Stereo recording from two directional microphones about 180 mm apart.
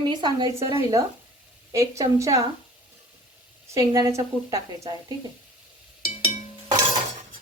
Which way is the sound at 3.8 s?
20° right (ahead or behind).